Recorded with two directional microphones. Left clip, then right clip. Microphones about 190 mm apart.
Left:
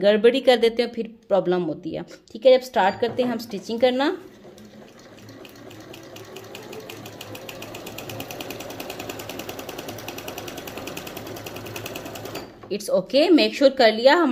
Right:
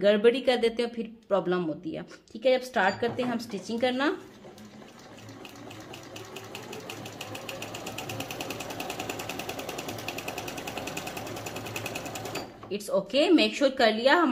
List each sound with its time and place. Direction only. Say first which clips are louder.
0.0 s speech: left 5 dB; 30° left (ahead or behind)
7.9 s sewing machine: left 2 dB; 10° right (ahead or behind)
12.6 s a woman's voice: left 6 dB; 35° left (ahead or behind)